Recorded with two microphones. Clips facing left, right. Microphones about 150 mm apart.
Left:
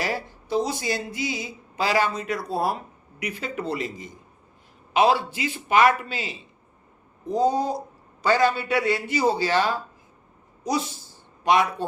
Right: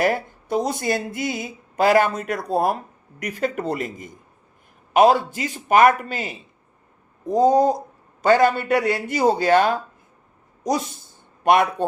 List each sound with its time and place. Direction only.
0.0 s speech: 50° right (ahead or behind)
11.4 s speech: 55° right (ahead or behind)